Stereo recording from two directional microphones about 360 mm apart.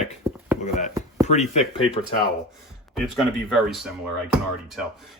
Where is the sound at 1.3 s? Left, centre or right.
Centre.